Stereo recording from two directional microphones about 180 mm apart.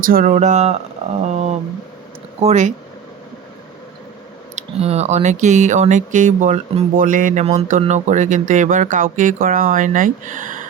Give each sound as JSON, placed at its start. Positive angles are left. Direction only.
{"t": 0.0, "sound": "speech", "side_deg": -50}
{"t": 2.4, "sound": "speech", "side_deg": -40}
{"t": 4.5, "sound": "speech", "side_deg": -35}